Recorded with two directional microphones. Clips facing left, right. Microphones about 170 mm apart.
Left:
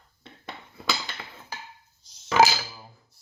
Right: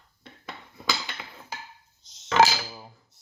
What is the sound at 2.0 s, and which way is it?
Dishes, 20° right (ahead or behind).